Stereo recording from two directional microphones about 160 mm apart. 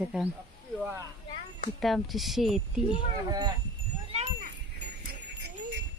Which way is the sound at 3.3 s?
25° right (ahead or behind).